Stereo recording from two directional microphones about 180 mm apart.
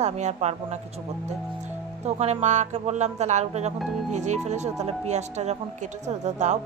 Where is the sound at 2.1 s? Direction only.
40° right (ahead or behind).